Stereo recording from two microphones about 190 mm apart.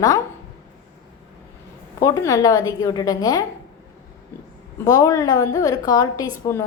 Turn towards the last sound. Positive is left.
turn(degrees=15)  # may be behind; listen again after turning